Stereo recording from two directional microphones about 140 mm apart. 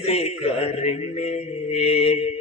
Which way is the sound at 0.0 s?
50° left (ahead or behind).